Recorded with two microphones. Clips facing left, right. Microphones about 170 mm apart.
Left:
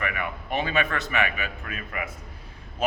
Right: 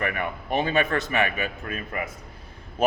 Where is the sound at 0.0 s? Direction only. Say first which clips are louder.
Right 3 dB; 40° right (ahead or behind).